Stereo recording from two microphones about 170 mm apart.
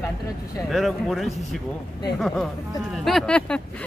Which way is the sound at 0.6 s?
Centre (ahead or behind).